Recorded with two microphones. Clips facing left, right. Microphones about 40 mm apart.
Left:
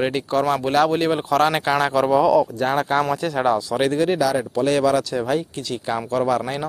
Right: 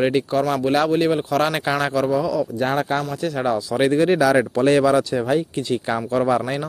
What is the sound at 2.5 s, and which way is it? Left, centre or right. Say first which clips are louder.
Speech: left 1 dB; centre.